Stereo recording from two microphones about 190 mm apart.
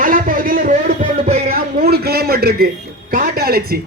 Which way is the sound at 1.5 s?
55° right (ahead or behind).